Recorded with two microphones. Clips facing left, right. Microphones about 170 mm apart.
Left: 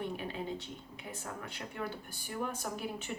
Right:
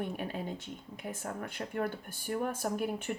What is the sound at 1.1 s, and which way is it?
Speech, 50° right (ahead or behind).